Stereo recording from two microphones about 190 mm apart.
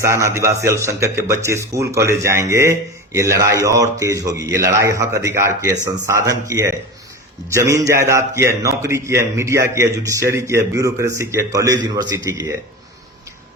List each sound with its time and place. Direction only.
0.0 s speech: 15° right (ahead or behind)